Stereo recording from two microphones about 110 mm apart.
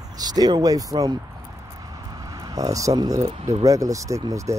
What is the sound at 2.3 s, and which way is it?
Speech, 35° right (ahead or behind).